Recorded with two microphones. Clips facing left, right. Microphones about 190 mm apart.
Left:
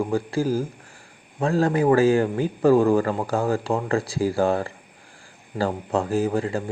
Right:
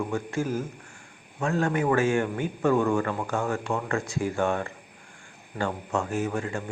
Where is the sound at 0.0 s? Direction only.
35° left (ahead or behind).